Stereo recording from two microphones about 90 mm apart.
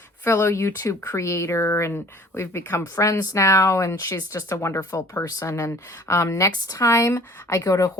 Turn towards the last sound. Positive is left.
turn(degrees=40)  # may be behind; listen again after turning